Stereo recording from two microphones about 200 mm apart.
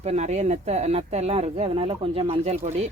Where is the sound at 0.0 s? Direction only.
35° right (ahead or behind).